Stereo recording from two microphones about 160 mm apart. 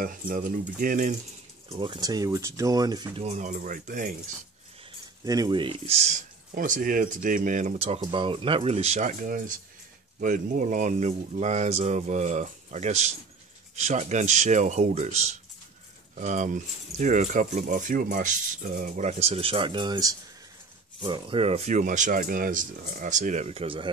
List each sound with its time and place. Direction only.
0.0 s speech: 60° right (ahead or behind)
1.7 s speech: 30° right (ahead or behind)
3.2 s speech: 50° right (ahead or behind)
5.2 s speech: 25° right (ahead or behind)
5.9 s speech: 50° right (ahead or behind)
8.0 s speech: 30° right (ahead or behind)